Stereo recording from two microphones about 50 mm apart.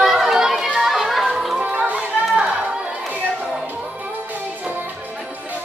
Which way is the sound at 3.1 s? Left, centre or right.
Right.